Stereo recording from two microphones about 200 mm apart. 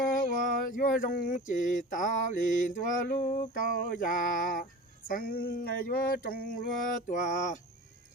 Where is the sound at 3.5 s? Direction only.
40° left (ahead or behind).